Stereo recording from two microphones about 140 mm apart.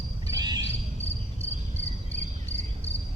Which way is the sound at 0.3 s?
30° right (ahead or behind).